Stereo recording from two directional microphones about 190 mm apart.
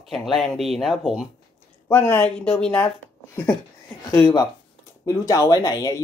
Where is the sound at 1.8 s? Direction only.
10° left (ahead or behind).